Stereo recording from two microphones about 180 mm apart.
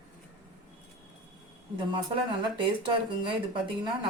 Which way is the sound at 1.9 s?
25° right (ahead or behind).